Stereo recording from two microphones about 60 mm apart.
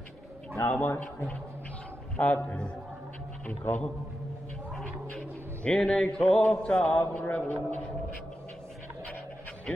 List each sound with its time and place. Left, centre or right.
0.6 s a man's voice: left
5.6 s a sound: centre
6.5 s a man's voice: centre